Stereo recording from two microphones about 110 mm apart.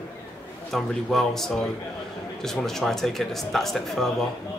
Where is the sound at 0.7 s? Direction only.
5° left (ahead or behind).